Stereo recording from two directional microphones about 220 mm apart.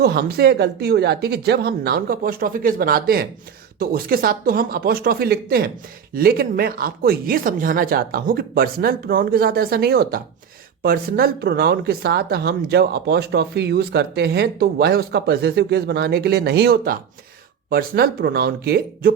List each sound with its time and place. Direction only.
0.0 s speech: 45° right (ahead or behind)